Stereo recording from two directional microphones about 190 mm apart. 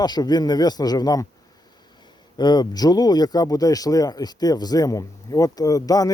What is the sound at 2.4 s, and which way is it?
Speech, 20° left (ahead or behind).